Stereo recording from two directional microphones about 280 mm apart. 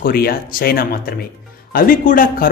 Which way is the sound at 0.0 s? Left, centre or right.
Left.